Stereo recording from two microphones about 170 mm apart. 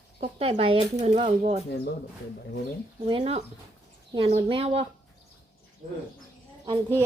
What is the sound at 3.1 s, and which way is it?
Speech, 35° right (ahead or behind).